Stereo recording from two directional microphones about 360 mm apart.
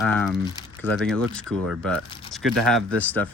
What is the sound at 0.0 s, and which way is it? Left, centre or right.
Speech, centre.